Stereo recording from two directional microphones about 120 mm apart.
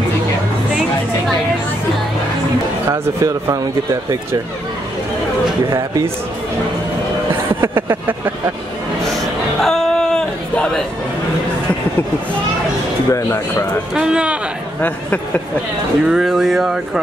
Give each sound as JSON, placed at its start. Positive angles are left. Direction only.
{"t": 2.9, "sound": "speech", "side_deg": -25}
{"t": 5.7, "sound": "speech", "side_deg": -30}
{"t": 7.6, "sound": "speech", "side_deg": -20}
{"t": 9.6, "sound": "a sound", "side_deg": 5}
{"t": 13.1, "sound": "speech", "side_deg": 25}
{"t": 13.9, "sound": "speech", "side_deg": -5}
{"t": 14.8, "sound": "speech", "side_deg": 15}
{"t": 16.1, "sound": "speech", "side_deg": -5}